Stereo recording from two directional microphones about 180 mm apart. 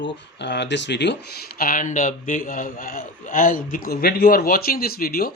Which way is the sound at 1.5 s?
50° left (ahead or behind).